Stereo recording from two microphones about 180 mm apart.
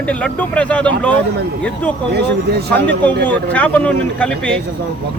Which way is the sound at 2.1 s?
65° right (ahead or behind).